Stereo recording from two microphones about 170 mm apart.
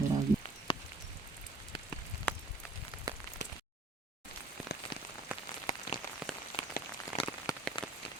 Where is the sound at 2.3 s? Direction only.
10° left (ahead or behind).